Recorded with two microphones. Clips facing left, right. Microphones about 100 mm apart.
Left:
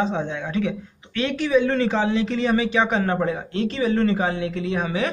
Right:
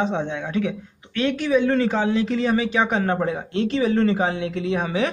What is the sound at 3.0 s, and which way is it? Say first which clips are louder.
Speech: even; 30° right (ahead or behind).